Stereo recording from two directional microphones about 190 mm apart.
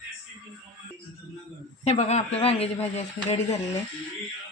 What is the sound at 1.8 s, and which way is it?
A man's voice, 35° left (ahead or behind).